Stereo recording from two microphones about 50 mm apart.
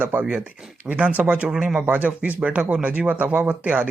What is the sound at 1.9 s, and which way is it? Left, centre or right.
Speech, right.